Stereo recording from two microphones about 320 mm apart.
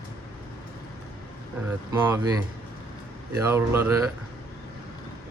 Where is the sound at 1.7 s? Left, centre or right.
Centre.